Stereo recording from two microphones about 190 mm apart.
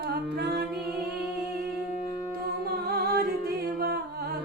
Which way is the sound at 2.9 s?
55° right (ahead or behind).